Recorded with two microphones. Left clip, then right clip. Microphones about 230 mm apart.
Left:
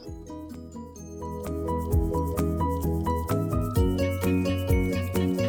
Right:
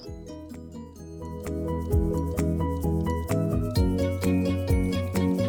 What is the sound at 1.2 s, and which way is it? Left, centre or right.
Music, centre.